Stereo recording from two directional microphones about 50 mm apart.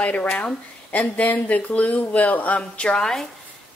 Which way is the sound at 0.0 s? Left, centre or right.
Left.